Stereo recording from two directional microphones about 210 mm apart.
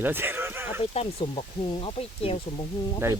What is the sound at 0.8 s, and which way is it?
Speech, 25° left (ahead or behind).